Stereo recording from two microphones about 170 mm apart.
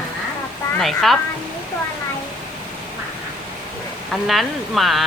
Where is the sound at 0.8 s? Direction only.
Centre (ahead or behind).